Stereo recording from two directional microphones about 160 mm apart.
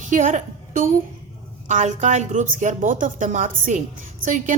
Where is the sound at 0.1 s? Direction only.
55° right (ahead or behind).